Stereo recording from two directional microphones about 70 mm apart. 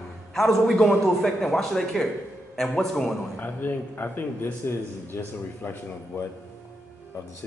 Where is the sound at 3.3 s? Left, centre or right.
Left.